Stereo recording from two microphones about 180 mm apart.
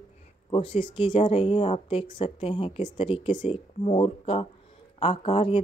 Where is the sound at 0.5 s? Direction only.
30° left (ahead or behind).